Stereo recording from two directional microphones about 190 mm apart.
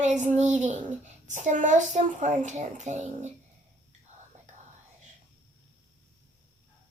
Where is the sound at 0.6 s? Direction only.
40° right (ahead or behind).